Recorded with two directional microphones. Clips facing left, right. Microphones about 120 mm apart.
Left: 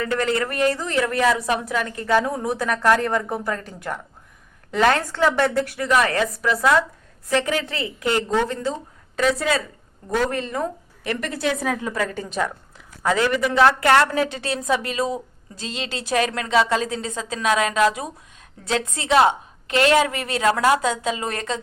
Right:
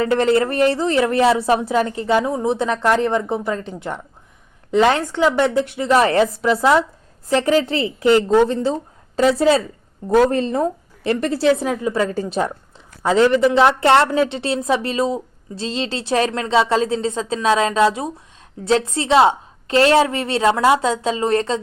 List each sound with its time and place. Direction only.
0.0 s a woman's voice: 30° right (ahead or behind)